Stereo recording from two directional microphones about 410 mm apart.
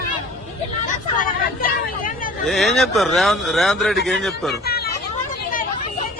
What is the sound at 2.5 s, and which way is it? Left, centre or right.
Speech, centre.